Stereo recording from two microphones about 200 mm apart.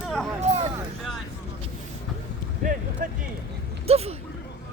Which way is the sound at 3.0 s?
45° right (ahead or behind).